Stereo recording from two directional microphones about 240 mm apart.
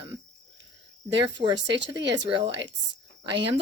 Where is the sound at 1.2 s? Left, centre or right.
Centre.